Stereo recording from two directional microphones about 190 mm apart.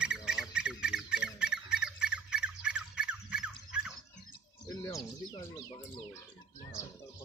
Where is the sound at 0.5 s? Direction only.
5° right (ahead or behind).